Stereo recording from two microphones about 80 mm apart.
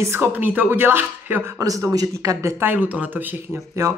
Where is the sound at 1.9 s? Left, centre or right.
Right.